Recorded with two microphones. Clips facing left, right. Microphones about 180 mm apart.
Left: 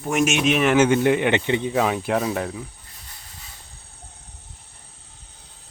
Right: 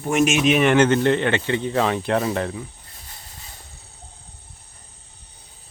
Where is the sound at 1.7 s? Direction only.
5° left (ahead or behind).